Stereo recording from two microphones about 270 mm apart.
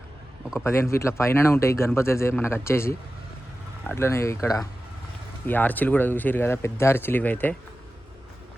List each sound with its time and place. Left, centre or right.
0.5 s speech: centre